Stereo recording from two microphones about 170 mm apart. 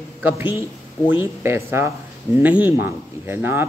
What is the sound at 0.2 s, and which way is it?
Speech, 10° right (ahead or behind).